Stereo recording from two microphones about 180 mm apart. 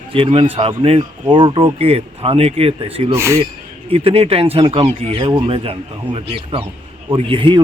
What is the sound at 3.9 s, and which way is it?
Speech, 35° right (ahead or behind).